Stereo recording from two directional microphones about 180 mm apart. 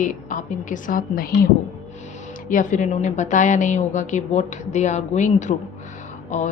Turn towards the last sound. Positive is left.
turn(degrees=40)  # may be behind; listen again after turning